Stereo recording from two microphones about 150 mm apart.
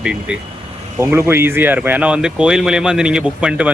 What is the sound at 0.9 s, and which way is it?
Speech, 20° right (ahead or behind).